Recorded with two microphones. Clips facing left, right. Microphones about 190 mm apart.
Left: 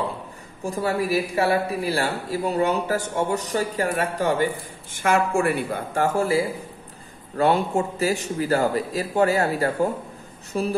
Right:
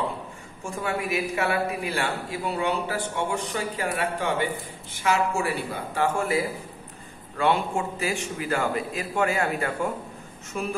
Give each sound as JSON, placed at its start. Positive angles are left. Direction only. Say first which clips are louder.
{"t": 0.7, "sound": "a man's voice", "louder": "left 5 dB", "side_deg": 35}
{"t": 4.9, "sound": "a woman's voice", "louder": "left 4 dB", "side_deg": 55}
{"t": 6.1, "sound": "a man's voice", "louder": "left 4 dB", "side_deg": 30}